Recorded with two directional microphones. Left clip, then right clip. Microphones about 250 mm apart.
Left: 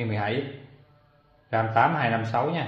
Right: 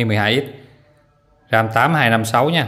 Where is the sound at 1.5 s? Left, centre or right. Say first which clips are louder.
Right 7 dB; right.